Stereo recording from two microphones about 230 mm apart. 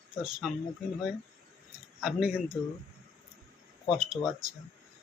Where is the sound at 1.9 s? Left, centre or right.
Centre.